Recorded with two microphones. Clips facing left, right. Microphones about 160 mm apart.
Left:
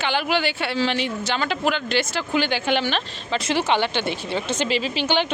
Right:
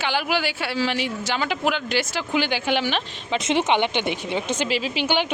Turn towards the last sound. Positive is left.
turn(degrees=-10)  # may be behind; listen again after turning